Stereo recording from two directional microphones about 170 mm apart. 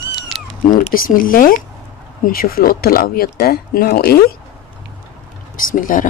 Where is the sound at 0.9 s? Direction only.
55° left (ahead or behind).